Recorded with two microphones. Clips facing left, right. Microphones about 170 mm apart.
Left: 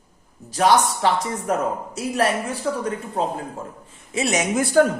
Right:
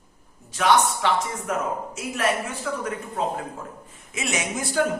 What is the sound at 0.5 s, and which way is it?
A man's voice, 35° left (ahead or behind).